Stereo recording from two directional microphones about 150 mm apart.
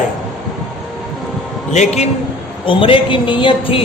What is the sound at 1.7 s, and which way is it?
Speech, 50° left (ahead or behind).